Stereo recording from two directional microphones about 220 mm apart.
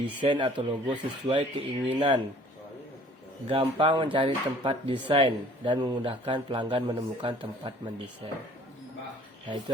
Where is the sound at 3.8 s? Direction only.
20° right (ahead or behind).